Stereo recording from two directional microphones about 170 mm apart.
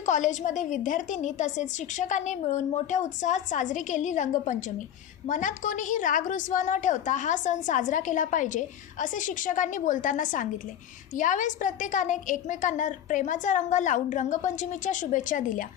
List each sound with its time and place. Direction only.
0.0 s a woman's voice: 45° left (ahead or behind)